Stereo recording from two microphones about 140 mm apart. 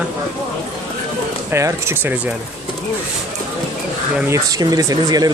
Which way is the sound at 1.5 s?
20° right (ahead or behind).